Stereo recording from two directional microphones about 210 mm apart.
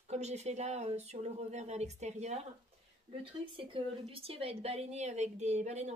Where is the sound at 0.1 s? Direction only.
30° right (ahead or behind).